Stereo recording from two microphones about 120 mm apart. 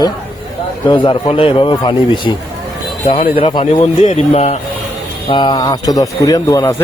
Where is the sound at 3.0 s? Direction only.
55° left (ahead or behind).